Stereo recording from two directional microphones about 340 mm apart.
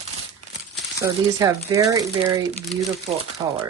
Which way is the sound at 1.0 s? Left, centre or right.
Centre.